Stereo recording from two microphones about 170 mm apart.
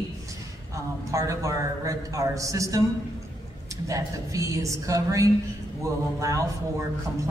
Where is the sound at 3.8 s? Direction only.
20° right (ahead or behind).